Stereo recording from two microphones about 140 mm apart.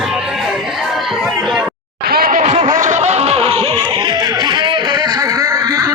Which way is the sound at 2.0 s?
90° right.